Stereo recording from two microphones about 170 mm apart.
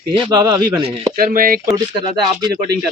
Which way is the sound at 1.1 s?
55° right (ahead or behind).